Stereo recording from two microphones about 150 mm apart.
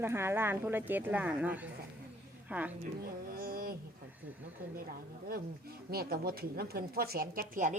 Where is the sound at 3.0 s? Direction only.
85° right.